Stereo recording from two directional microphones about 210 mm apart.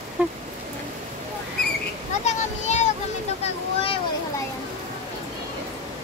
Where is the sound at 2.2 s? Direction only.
35° left (ahead or behind).